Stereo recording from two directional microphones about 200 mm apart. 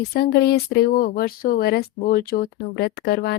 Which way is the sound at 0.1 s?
55° left (ahead or behind).